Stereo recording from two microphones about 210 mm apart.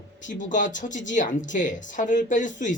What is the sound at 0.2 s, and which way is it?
Speech, 35° left (ahead or behind).